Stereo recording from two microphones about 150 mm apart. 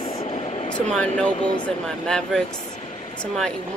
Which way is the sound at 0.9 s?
5° left (ahead or behind).